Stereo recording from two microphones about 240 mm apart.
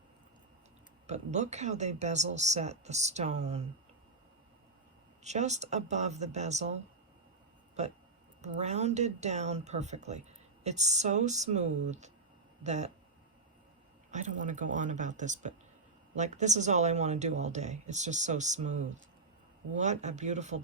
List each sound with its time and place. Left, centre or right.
1.0 s speech: right
5.2 s speech: right
7.8 s speech: right
14.1 s speech: right
19.7 s speech: right